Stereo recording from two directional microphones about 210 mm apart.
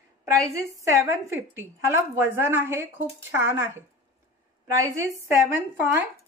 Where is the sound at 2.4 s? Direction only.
10° right (ahead or behind).